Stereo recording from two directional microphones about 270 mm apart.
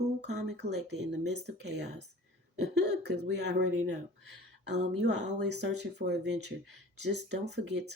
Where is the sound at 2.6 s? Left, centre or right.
Right.